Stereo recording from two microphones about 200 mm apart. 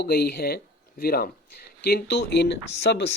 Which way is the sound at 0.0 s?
50° left (ahead or behind).